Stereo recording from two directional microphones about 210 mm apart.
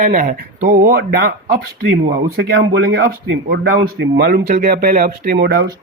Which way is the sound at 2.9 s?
50° right (ahead or behind).